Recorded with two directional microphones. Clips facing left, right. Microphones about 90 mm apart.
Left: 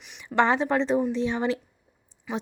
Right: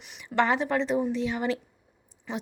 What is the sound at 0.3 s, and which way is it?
Speech, 25° left (ahead or behind).